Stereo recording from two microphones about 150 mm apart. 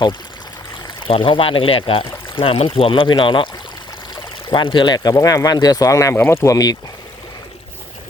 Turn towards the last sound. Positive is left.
turn(degrees=25)  # may be behind; listen again after turning